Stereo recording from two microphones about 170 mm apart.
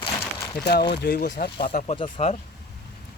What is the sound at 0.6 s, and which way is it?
Speech, 75° left (ahead or behind).